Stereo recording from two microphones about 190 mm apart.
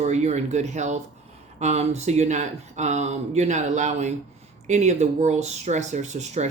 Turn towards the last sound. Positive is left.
turn(degrees=-35)  # may be behind; listen again after turning